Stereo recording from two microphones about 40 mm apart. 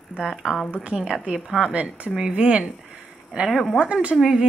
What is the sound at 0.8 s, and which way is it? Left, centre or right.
Speech, right.